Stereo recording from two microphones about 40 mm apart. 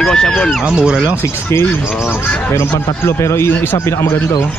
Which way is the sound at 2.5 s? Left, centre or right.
Left.